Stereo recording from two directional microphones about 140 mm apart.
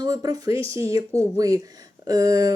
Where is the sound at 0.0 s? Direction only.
25° right (ahead or behind).